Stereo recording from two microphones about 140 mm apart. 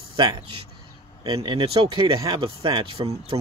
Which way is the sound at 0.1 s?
35° right (ahead or behind).